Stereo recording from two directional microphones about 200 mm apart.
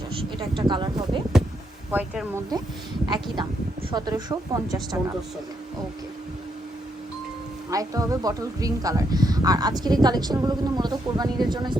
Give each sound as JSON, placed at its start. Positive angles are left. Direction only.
{"t": 0.3, "sound": "speech", "side_deg": -25}
{"t": 1.9, "sound": "speech", "side_deg": -10}
{"t": 3.9, "sound": "speech", "side_deg": -20}
{"t": 7.7, "sound": "speech", "side_deg": -15}